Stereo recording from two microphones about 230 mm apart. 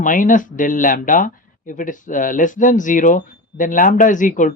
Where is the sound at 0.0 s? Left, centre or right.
Left.